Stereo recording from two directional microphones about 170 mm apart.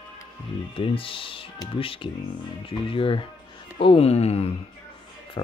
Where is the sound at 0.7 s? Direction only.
30° left (ahead or behind).